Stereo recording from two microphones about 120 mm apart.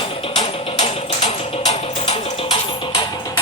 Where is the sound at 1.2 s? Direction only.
60° left (ahead or behind).